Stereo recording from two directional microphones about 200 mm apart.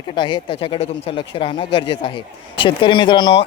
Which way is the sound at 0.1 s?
25° left (ahead or behind).